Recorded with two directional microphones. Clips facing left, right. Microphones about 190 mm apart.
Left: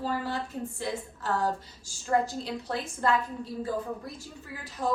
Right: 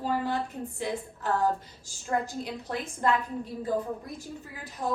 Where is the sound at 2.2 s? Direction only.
15° right (ahead or behind).